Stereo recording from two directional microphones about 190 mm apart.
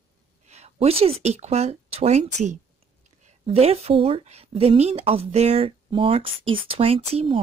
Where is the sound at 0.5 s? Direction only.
35° right (ahead or behind).